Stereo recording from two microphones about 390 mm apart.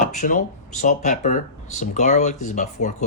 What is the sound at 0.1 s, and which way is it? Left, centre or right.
Speech, centre.